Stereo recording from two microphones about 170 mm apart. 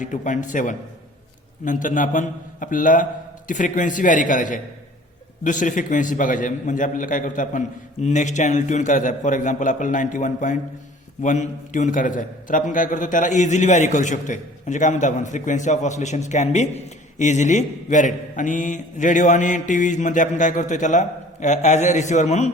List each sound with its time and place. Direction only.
0.0 s a man's voice: 45° left (ahead or behind)